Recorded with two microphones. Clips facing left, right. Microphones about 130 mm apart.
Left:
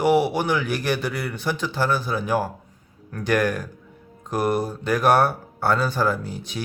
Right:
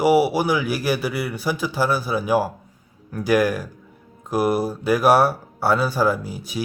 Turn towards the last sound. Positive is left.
turn(degrees=-5)  # may be behind; listen again after turning